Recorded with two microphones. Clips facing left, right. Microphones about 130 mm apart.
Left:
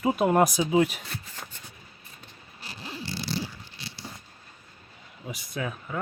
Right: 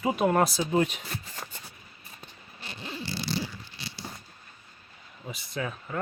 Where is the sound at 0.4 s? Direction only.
15° left (ahead or behind).